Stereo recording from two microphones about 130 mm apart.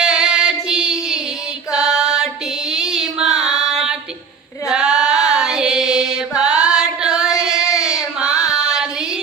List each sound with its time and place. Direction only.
0.0 s female singing: 5° right (ahead or behind)
1.7 s music: 5° right (ahead or behind)
2.6 s child singing: 5° right (ahead or behind)
4.7 s a sound: 5° right (ahead or behind)
8.3 s female singing: 25° left (ahead or behind)
8.5 s child singing: 5° right (ahead or behind)